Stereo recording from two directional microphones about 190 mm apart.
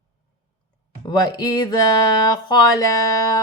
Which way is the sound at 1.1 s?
20° left (ahead or behind).